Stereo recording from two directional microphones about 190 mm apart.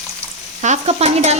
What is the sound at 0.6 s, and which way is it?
Speech, 35° right (ahead or behind).